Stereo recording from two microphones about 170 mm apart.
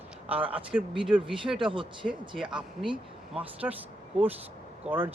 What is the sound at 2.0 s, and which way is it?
Speech, 5° right (ahead or behind).